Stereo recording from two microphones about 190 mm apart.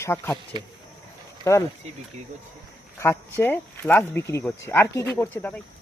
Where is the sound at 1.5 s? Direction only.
15° left (ahead or behind).